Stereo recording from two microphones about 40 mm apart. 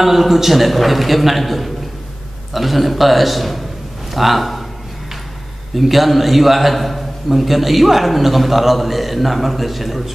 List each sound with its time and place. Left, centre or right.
0.0 s a man's voice: centre
5.8 s a man's voice: centre